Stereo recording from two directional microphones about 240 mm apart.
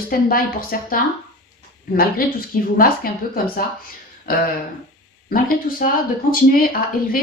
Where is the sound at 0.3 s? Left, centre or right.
Left.